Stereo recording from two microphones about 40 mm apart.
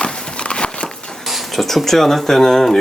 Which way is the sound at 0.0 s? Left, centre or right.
Left.